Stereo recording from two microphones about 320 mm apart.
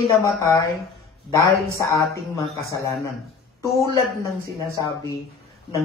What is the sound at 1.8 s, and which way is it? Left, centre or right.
Speech, centre.